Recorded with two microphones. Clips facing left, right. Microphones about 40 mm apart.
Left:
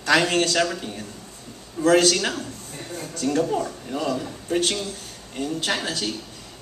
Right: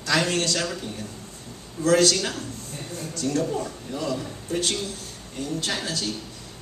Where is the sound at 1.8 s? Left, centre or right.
Left.